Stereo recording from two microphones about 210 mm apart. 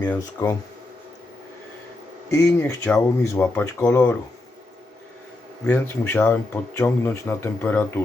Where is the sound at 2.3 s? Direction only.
10° left (ahead or behind).